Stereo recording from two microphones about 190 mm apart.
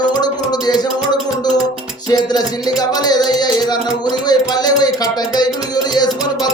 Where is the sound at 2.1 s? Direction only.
20° left (ahead or behind).